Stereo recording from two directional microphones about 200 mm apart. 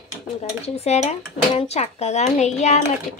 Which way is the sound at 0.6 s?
30° left (ahead or behind).